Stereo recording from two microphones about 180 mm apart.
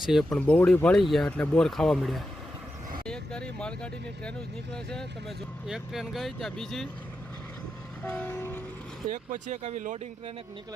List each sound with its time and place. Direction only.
0.0 s speech: centre (ahead or behind)
8.0 s train: 10° left (ahead or behind)
9.0 s speech: 45° right (ahead or behind)